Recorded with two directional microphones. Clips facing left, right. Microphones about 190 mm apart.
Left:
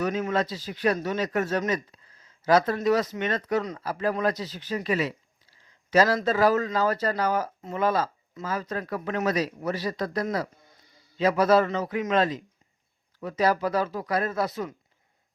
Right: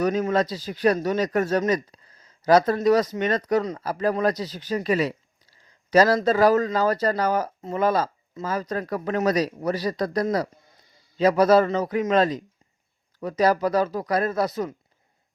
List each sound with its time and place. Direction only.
0.0 s speech: 40° right (ahead or behind)